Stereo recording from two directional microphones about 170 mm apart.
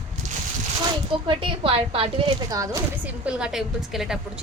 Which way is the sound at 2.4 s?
20° right (ahead or behind).